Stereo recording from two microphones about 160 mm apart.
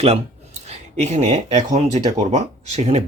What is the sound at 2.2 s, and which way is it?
Speech, 45° right (ahead or behind).